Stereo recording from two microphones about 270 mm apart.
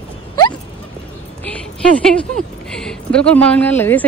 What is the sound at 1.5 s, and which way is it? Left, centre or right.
A woman's voice, centre.